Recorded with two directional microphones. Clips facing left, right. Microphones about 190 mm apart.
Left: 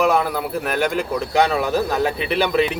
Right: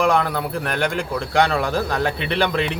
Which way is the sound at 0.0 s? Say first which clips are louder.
Left 1 dB; 5° left (ahead or behind).